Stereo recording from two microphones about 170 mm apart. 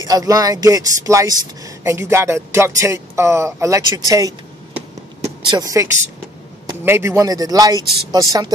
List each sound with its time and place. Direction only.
0.0 s a man's voice: 20° right (ahead or behind)
5.5 s a man's voice: 20° right (ahead or behind)